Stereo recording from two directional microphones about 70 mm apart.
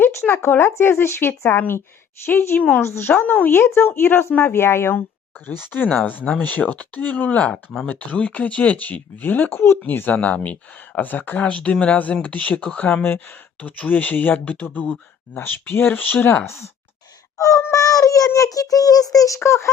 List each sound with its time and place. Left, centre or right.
0.0 s speech: left
5.8 s speech: centre
6.1 s speech: left
17.3 s a sound: left
18.3 s speech: left
19.4 s speech: left